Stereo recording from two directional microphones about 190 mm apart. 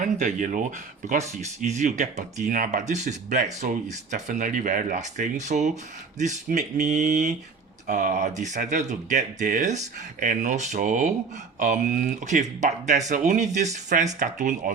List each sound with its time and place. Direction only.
0.2 s speech: 40° right (ahead or behind)